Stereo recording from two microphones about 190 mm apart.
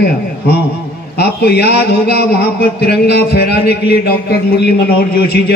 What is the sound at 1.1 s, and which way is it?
A man's voice, 60° left (ahead or behind).